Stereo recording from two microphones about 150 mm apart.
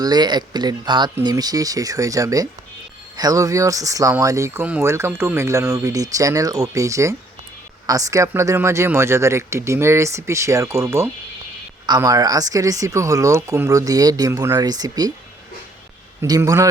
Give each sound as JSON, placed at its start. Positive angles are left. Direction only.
{"t": 0.0, "sound": "speech", "side_deg": -30}
{"t": 16.2, "sound": "speech", "side_deg": -25}